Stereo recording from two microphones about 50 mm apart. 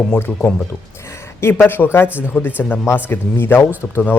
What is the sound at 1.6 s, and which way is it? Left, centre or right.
Speech, left.